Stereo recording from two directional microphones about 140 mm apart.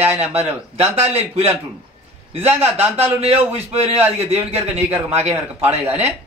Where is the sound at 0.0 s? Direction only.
45° right (ahead or behind).